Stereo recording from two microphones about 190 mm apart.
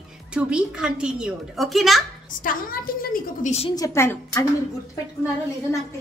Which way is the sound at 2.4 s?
50° left (ahead or behind).